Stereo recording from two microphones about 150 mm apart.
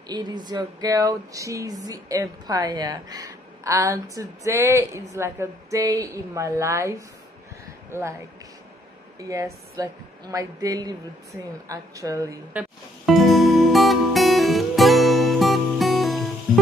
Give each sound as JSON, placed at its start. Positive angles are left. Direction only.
{"t": 0.1, "sound": "speech", "side_deg": -30}
{"t": 9.3, "sound": "speech", "side_deg": -20}
{"t": 13.0, "sound": "music", "side_deg": 0}